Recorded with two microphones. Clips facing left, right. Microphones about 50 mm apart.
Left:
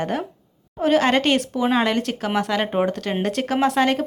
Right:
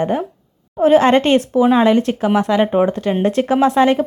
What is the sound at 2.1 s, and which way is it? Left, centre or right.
Speech, centre.